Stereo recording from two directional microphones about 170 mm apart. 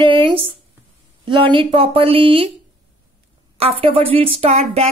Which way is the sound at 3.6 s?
35° right (ahead or behind).